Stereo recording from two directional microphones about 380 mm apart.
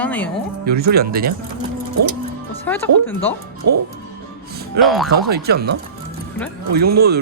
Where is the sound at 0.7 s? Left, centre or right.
Right.